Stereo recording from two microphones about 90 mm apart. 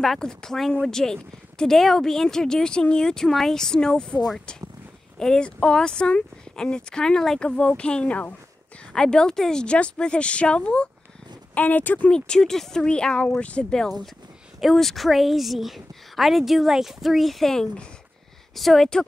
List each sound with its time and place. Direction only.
0.0 s a woman's voice: 5° left (ahead or behind)
12.1 s speech: 10° left (ahead or behind)
13.8 s a woman's voice: centre (ahead or behind)